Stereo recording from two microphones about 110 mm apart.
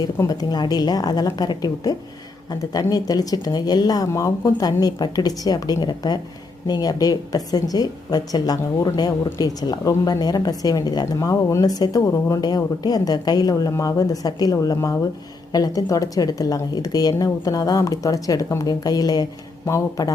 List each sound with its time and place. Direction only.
0.2 s a woman's voice: 35° left (ahead or behind)